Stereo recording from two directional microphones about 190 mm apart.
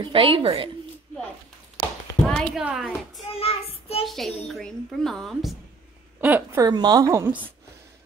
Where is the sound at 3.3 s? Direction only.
30° left (ahead or behind).